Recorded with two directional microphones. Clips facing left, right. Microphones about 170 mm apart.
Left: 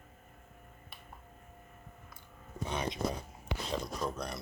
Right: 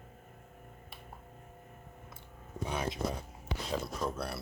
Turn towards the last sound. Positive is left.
turn(degrees=-5)  # may be behind; listen again after turning